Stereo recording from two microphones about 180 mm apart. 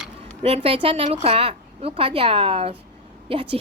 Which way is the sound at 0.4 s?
35° right (ahead or behind).